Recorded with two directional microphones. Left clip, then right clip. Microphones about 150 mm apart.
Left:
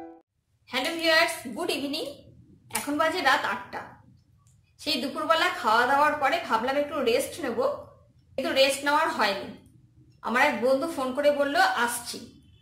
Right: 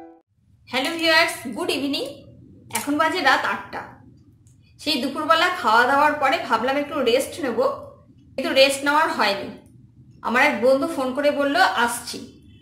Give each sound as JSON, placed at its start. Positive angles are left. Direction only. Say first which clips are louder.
{"t": 0.7, "sound": "a woman's voice", "louder": "right 4 dB", "side_deg": 0}